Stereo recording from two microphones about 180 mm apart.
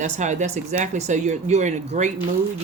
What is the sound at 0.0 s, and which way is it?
Speech, 40° right (ahead or behind).